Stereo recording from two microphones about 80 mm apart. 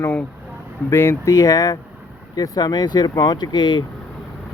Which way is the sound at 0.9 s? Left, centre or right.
Left.